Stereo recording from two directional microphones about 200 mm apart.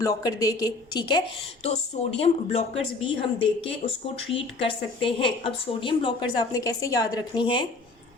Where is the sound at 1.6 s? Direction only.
35° left (ahead or behind).